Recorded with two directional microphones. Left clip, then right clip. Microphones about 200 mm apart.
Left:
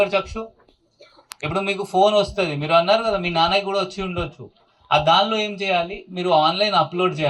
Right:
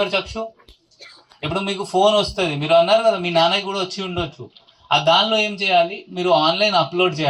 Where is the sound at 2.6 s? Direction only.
35° right (ahead or behind).